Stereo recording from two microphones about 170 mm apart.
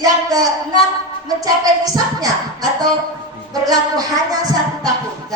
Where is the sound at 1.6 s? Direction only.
20° right (ahead or behind).